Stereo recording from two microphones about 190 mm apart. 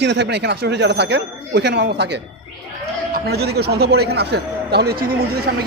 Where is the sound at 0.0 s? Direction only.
65° right (ahead or behind).